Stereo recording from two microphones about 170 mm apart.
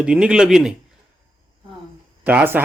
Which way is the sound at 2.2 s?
10° right (ahead or behind).